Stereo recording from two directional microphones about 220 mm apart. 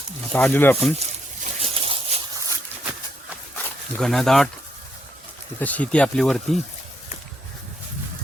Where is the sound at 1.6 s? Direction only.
25° right (ahead or behind).